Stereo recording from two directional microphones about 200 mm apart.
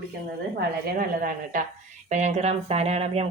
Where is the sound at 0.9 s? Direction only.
45° right (ahead or behind).